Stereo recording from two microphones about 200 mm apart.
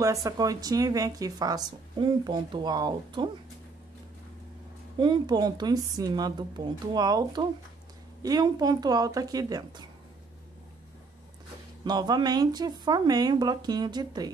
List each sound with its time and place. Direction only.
0.0 s speech: 15° right (ahead or behind)
4.9 s speech: 25° right (ahead or behind)
11.8 s speech: 20° right (ahead or behind)